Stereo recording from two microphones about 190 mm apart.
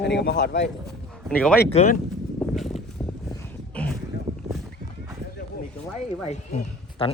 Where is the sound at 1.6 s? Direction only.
35° left (ahead or behind).